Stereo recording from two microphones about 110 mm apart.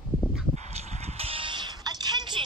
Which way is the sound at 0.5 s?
85° right.